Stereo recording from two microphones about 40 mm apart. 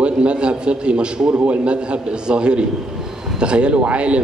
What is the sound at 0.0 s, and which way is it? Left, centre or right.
A man's voice, right.